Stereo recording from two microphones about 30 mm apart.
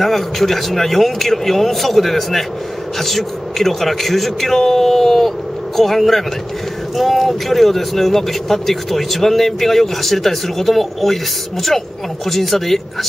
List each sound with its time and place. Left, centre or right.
0.0 s a man's voice: centre
12.3 s a man's voice: centre